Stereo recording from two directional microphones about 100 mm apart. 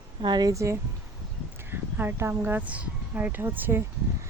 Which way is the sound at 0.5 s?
30° right (ahead or behind).